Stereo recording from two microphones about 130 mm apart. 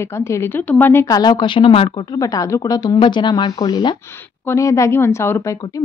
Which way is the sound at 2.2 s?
25° left (ahead or behind).